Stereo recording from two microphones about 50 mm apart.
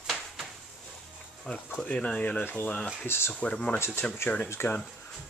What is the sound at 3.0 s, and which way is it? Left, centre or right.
Speech, left.